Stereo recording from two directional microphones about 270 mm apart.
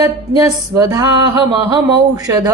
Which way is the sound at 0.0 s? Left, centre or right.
Centre.